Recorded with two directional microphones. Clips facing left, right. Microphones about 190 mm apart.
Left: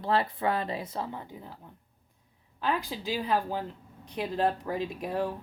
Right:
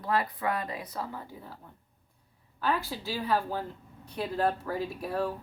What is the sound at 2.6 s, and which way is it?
A woman's voice, 15° left (ahead or behind).